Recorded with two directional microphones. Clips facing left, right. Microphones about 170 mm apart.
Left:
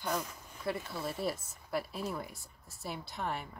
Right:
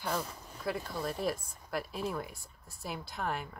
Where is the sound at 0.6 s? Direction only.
Centre (ahead or behind).